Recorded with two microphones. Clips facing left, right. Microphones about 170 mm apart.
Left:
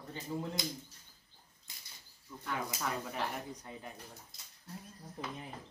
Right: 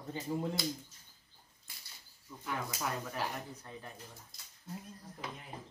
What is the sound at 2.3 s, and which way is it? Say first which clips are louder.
Speech: left 1 dB; 10° right (ahead or behind).